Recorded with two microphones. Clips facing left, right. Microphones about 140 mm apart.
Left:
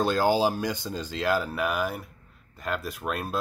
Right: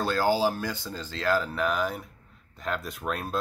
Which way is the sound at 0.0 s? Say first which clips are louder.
Left 2 dB; 15° left (ahead or behind).